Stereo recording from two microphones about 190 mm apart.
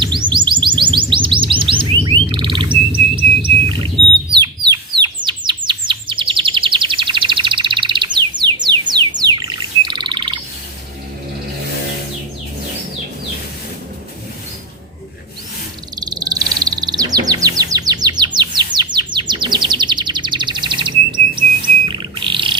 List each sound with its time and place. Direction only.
0.0 s music: 25° right (ahead or behind)
4.4 s bird: 25° right (ahead or behind)
16.0 s bird: 20° right (ahead or behind)
18.3 s chirp: 25° right (ahead or behind)
21.8 s bird: 25° right (ahead or behind)